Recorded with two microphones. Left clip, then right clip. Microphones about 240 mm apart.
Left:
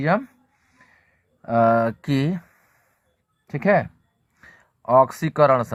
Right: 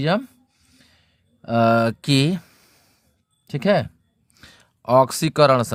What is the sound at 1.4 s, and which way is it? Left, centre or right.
Speech, right.